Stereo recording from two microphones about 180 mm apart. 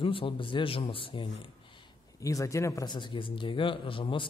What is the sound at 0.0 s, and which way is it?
A man's voice, 30° left (ahead or behind).